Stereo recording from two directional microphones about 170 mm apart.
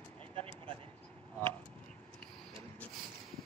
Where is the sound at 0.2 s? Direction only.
30° right (ahead or behind).